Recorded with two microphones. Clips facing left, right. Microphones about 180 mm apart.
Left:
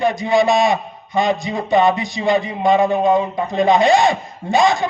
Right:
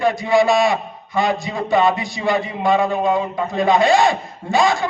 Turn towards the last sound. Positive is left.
turn(degrees=20)  # may be behind; listen again after turning